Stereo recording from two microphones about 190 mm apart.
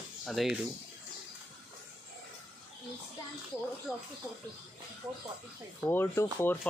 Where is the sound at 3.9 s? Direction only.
Centre (ahead or behind).